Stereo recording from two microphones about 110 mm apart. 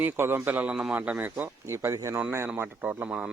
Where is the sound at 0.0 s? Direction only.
20° right (ahead or behind).